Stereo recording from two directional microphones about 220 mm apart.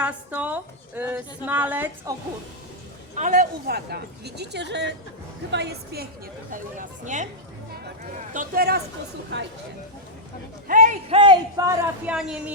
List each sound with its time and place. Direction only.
0.0 s a woman's voice: 5° right (ahead or behind)
3.2 s a woman's voice: 35° right (ahead or behind)
6.5 s speech: 35° right (ahead or behind)
8.3 s speech: 40° right (ahead or behind)
10.7 s speech: 35° right (ahead or behind)
11.2 s a woman's voice: 20° right (ahead or behind)
12.1 s a woman's voice: 5° right (ahead or behind)